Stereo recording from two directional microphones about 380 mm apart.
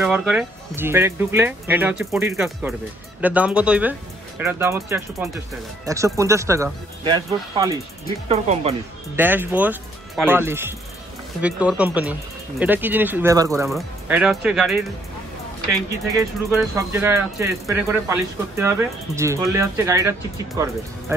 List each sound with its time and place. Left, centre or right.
0.0 s speech: centre
9.1 s speech: centre
16.4 s speech: centre